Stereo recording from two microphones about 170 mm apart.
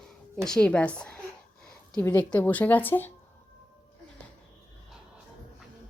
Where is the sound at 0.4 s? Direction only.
5° left (ahead or behind).